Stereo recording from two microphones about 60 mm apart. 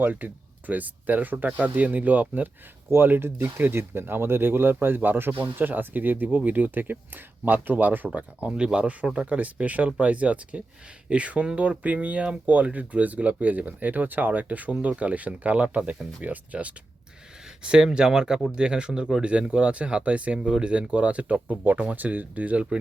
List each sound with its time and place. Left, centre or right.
0.0 s speech: right
17.6 s speech: centre